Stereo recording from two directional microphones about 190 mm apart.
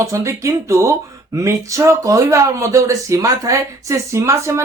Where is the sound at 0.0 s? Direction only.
15° right (ahead or behind).